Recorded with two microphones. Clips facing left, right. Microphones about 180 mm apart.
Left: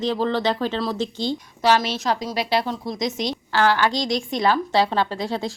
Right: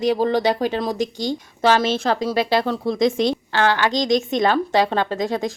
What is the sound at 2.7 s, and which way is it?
Speech, 60° right (ahead or behind).